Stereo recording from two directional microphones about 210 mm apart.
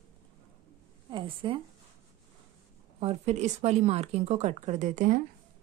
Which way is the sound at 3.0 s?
30° right (ahead or behind).